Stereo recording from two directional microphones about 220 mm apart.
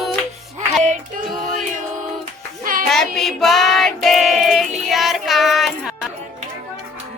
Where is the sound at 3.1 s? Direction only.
Centre (ahead or behind).